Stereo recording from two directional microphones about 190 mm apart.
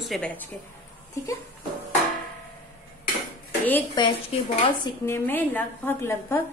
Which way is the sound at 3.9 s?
25° left (ahead or behind).